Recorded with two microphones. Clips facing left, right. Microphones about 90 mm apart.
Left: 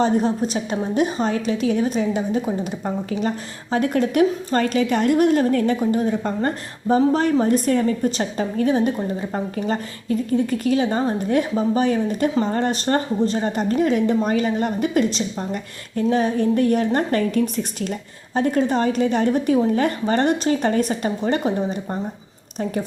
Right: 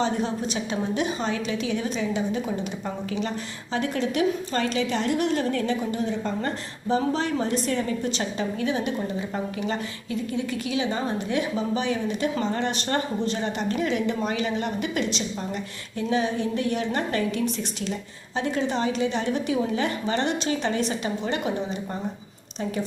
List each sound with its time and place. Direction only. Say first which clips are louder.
0.0 s a woman's voice: left 6 dB; 45° left (ahead or behind)